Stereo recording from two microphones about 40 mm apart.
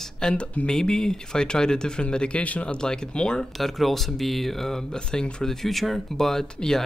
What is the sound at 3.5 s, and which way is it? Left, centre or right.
Speech, centre.